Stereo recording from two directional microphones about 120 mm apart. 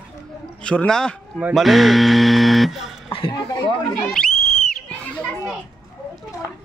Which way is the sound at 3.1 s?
45° left (ahead or behind).